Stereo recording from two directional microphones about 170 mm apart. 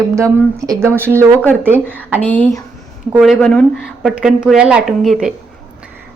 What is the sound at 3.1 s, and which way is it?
A woman's voice, centre (ahead or behind).